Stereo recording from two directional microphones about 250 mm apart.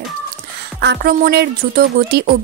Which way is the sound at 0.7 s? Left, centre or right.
Right.